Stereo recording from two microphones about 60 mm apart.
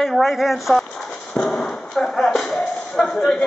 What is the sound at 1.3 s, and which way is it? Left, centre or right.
Speech, centre.